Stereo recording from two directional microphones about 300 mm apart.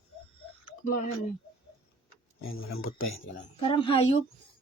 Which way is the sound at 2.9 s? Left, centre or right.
Left.